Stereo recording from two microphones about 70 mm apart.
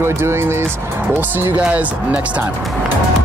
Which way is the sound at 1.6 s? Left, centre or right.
Centre.